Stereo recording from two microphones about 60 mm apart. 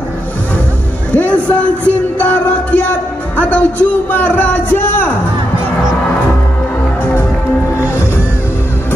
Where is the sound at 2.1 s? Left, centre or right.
Left.